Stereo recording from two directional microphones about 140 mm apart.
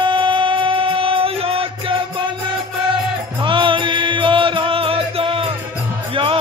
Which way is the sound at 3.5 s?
35° right (ahead or behind).